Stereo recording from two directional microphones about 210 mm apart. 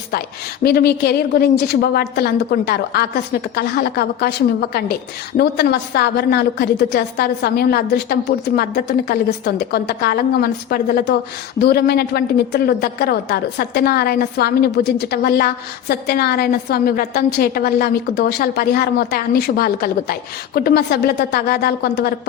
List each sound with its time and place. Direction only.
0.6 s a woman's voice: 50° left (ahead or behind)